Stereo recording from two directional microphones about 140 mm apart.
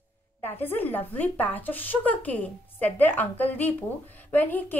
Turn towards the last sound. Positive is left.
turn(degrees=10)  # may be behind; listen again after turning